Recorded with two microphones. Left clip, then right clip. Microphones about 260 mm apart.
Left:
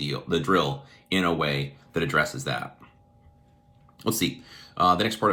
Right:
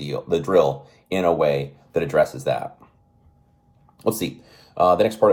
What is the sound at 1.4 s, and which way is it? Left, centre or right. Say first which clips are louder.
Speech: right 7 dB; centre.